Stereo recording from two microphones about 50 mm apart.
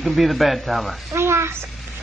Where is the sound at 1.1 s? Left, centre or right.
Right.